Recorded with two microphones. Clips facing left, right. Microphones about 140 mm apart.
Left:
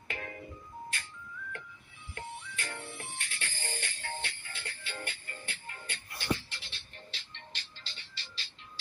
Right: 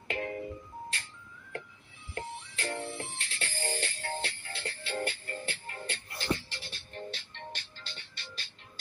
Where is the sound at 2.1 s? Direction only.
30° right (ahead or behind).